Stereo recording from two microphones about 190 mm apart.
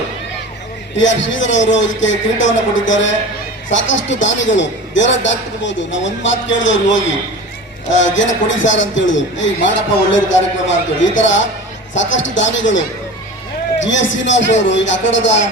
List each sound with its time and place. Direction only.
0.9 s a man's voice: 75° left (ahead or behind)
13.8 s a man's voice: 75° left (ahead or behind)